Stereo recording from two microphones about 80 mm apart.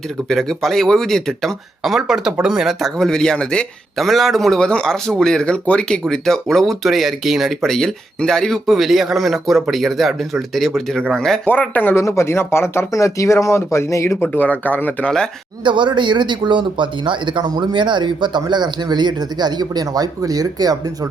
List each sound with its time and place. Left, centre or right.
0.3 s speech: centre
3.9 s speech: centre
11.6 s speech: left
11.9 s speech: left
14.3 s speech: centre
15.6 s speech: right